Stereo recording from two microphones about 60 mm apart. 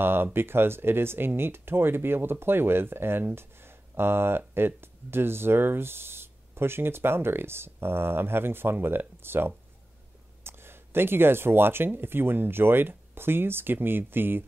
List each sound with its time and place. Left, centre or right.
0.0 s speech: right